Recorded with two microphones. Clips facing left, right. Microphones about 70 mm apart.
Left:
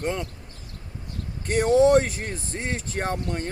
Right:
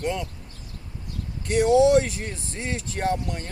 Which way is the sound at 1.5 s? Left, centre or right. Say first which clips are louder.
Even; left.